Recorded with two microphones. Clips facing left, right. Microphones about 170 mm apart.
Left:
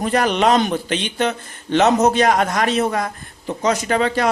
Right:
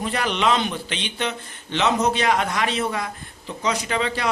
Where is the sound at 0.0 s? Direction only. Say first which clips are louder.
Left 6 dB; 45° left (ahead or behind).